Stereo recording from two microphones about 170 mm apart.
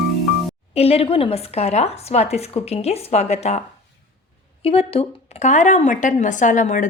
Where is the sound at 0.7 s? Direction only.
35° left (ahead or behind).